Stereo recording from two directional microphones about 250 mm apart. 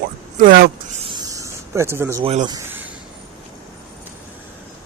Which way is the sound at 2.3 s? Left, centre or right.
Right.